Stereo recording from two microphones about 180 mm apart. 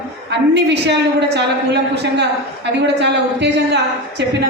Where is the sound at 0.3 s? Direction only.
70° right (ahead or behind).